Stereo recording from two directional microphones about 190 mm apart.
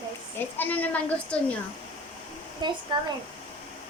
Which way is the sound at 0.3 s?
10° left (ahead or behind).